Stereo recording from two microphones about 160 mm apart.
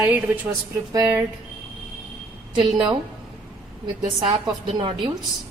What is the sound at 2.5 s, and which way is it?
A woman's voice, 30° right (ahead or behind).